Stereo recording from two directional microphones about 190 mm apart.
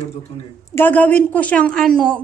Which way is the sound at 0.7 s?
10° left (ahead or behind).